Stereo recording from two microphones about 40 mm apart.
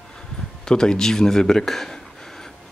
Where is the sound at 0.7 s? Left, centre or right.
Centre.